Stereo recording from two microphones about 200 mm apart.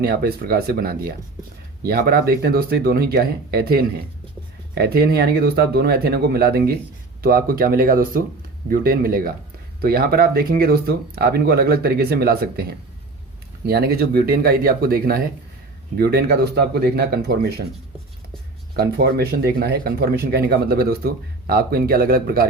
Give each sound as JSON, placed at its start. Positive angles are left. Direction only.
{"t": 0.0, "sound": "speech", "side_deg": -50}
{"t": 18.7, "sound": "speech", "side_deg": -50}